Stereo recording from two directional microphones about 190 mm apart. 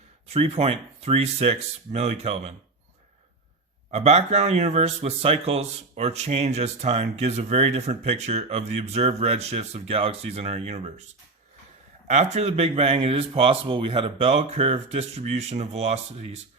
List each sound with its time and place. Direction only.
0.3 s speech: 30° right (ahead or behind)
3.9 s speech: 35° right (ahead or behind)
12.0 s speech: 35° right (ahead or behind)